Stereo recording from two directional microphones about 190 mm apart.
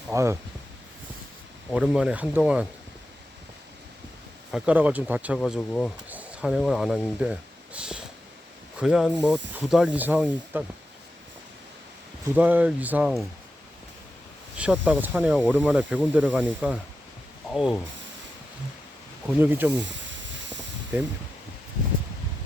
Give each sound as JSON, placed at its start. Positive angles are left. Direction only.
{"t": 0.1, "sound": "speech", "side_deg": -15}
{"t": 1.7, "sound": "speech", "side_deg": -5}
{"t": 4.5, "sound": "speech", "side_deg": -5}
{"t": 5.4, "sound": "speech", "side_deg": 5}
{"t": 6.1, "sound": "speech", "side_deg": -5}
{"t": 12.4, "sound": "speech", "side_deg": -10}
{"t": 14.5, "sound": "speech", "side_deg": -5}
{"t": 19.4, "sound": "speech", "side_deg": -10}
{"t": 20.1, "sound": "a sound", "side_deg": -75}